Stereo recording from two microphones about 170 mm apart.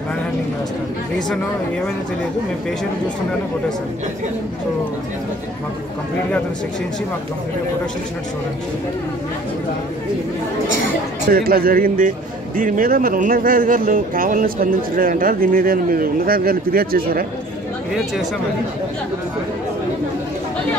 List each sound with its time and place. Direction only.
11.2 s speech: 60° right (ahead or behind)